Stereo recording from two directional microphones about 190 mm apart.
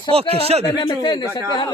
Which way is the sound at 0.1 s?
30° right (ahead or behind).